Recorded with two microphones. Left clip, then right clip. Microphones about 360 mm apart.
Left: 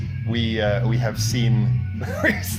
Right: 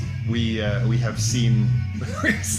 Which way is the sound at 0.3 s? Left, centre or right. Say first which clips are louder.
Left 4 dB; centre.